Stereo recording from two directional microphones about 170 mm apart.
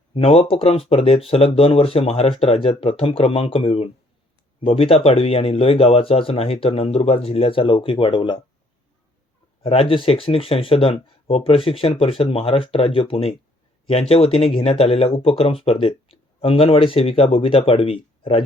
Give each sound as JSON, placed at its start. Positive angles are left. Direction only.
{"t": 0.1, "sound": "speech", "side_deg": 35}
{"t": 9.6, "sound": "speech", "side_deg": 30}